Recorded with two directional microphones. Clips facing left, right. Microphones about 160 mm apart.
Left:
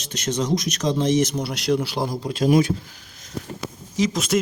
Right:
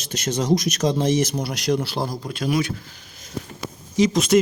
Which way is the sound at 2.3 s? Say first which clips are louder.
Left 6 dB; 40° left (ahead or behind).